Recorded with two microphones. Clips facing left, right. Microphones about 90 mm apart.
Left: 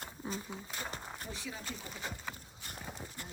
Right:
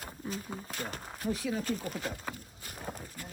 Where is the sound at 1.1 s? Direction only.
Centre (ahead or behind).